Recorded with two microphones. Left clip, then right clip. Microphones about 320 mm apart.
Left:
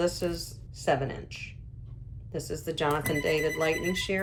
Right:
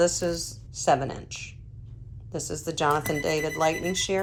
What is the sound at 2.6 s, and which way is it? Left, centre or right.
Speech, centre.